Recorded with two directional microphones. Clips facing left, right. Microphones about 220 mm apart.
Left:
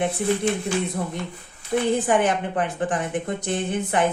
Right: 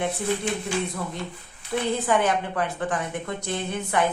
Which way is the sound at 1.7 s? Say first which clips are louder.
Left 3 dB; 25° left (ahead or behind).